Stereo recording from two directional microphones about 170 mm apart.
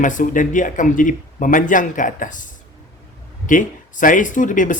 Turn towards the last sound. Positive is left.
turn(degrees=50)  # may be behind; listen again after turning